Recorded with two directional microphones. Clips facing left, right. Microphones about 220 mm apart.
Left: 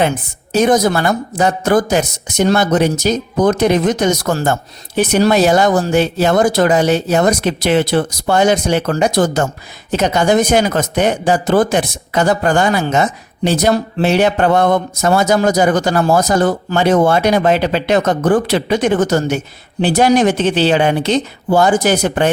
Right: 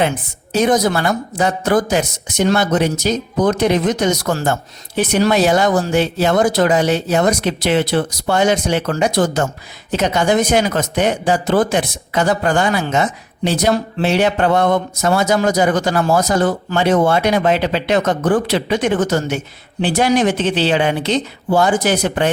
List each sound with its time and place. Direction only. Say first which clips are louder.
0.5 s speech: left 2 dB; 45° left (ahead or behind)